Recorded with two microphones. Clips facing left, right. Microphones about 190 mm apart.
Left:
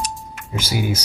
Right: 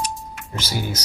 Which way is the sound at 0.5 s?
10° left (ahead or behind).